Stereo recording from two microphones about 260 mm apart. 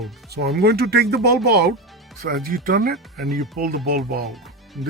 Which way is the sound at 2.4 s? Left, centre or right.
Right.